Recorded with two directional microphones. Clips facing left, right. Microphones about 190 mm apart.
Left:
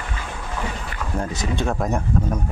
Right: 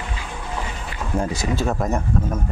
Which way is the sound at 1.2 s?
10° right (ahead or behind).